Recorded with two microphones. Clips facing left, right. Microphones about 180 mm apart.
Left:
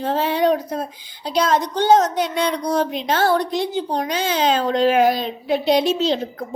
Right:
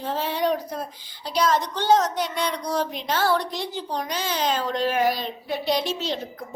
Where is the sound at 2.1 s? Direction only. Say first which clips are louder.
Left 5 dB; 25° left (ahead or behind).